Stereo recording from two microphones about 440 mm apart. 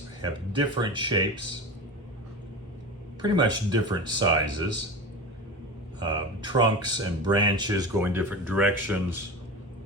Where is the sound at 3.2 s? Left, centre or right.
Centre.